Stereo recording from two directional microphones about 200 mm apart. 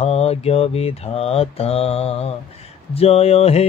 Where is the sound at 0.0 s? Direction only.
30° left (ahead or behind).